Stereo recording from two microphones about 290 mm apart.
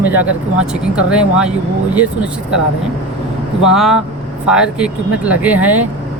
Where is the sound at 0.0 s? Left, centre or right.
Centre.